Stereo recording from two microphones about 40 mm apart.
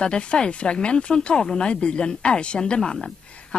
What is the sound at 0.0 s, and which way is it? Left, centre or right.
Speech, left.